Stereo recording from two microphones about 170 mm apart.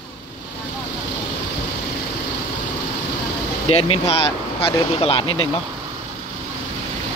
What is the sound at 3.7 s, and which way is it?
Speech, 35° left (ahead or behind).